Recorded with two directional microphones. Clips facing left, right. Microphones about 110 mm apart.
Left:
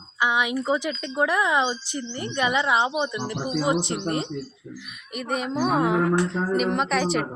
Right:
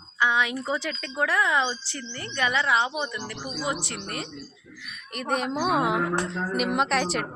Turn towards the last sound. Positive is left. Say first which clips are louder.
# left 2 dB
turn(degrees=0)  # may be behind; listen again after turning